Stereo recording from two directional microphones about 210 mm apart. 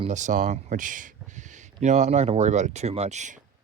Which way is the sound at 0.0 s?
35° right (ahead or behind).